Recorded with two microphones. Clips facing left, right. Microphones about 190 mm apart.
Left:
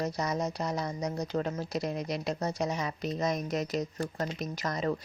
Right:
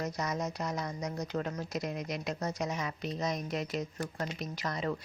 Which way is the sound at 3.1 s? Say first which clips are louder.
Left 4 dB; 50° left (ahead or behind).